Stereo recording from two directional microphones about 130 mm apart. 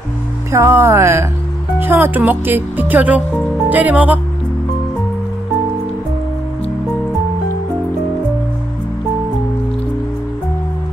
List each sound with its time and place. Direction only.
0.5 s speech: 20° right (ahead or behind)